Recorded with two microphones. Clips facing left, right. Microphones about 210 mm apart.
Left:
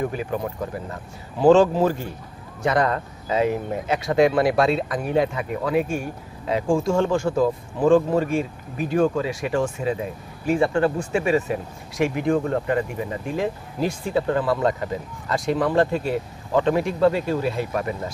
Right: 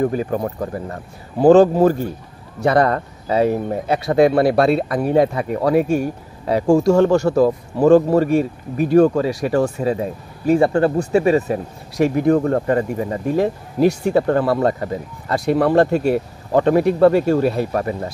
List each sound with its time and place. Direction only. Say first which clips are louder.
0.0 s speech: right 6 dB; 40° right (ahead or behind)
2.6 s speech: right 5 dB; 35° right (ahead or behind)
13.7 s speech: right 11 dB; 70° right (ahead or behind)
14.1 s speech: right 5 dB; 45° right (ahead or behind)
16.5 s speech: right 6 dB; 45° right (ahead or behind)